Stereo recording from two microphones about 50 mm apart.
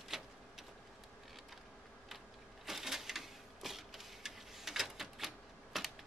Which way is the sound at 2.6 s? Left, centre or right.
Centre.